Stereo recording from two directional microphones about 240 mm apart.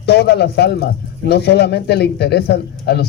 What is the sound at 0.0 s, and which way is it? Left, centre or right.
A man's voice, left.